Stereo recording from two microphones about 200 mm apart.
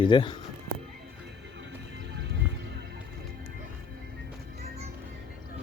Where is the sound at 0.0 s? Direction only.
25° left (ahead or behind).